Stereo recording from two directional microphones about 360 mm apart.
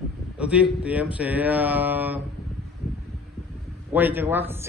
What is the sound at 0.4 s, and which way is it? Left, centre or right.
A man's voice, centre.